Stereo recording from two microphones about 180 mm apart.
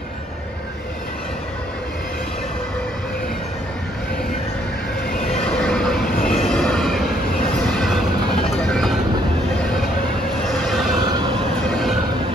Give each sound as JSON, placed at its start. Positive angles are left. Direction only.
{"t": 5.4, "sound": "train", "side_deg": 5}
{"t": 8.5, "sound": "a sound", "side_deg": 5}
{"t": 10.6, "sound": "vehicle", "side_deg": 0}
{"t": 11.0, "sound": "train", "side_deg": -20}
{"t": 11.7, "sound": "train", "side_deg": 0}